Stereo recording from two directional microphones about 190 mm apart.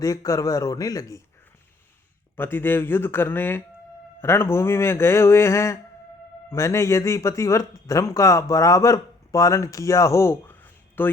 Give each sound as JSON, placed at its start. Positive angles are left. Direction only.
{"t": 0.0, "sound": "speech", "side_deg": 15}
{"t": 2.3, "sound": "speech", "side_deg": 10}